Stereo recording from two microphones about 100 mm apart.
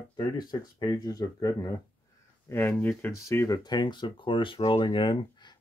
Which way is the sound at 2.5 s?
20° left (ahead or behind).